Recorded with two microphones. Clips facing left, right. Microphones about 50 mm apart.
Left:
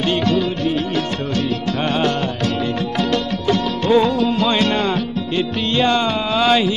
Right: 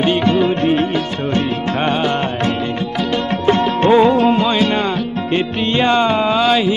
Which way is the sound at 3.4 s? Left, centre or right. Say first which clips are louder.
Right 6 dB; right.